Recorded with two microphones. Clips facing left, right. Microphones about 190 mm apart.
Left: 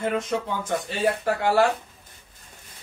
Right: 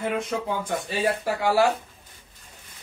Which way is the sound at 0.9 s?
10° right (ahead or behind).